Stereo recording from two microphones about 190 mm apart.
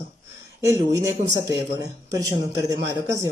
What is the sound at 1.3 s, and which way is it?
Speech, 15° right (ahead or behind).